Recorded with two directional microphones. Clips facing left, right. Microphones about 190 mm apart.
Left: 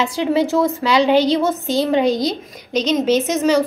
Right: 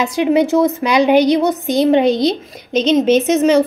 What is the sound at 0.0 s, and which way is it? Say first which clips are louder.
A woman's voice: right 4 dB; 15° right (ahead or behind).